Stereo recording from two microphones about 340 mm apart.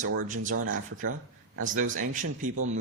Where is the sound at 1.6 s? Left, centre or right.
Right.